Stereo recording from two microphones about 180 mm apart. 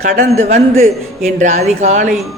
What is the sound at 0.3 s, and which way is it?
A man's voice, 40° right (ahead or behind).